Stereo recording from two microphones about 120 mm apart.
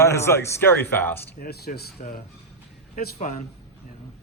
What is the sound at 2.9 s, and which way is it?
Speech, 90° left.